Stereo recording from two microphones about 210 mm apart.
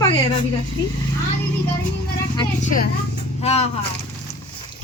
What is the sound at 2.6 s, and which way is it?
Speech, 40° left (ahead or behind).